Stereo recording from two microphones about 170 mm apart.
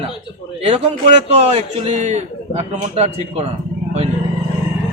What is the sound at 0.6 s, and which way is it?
A man's voice, 35° right (ahead or behind).